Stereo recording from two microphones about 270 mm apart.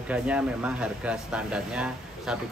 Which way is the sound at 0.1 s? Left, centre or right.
Centre.